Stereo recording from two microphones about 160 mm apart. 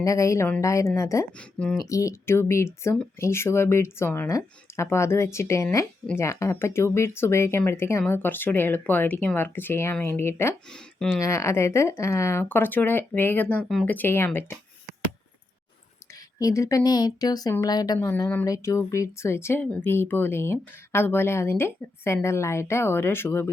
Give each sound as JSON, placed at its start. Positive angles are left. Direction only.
{"t": 0.0, "sound": "speech", "side_deg": 20}
{"t": 1.4, "sound": "speech", "side_deg": 5}
{"t": 1.9, "sound": "speech", "side_deg": 20}
{"t": 10.7, "sound": "speech", "side_deg": 5}
{"t": 11.2, "sound": "speech", "side_deg": 20}
{"t": 16.4, "sound": "speech", "side_deg": 20}
{"t": 18.1, "sound": "speech", "side_deg": 10}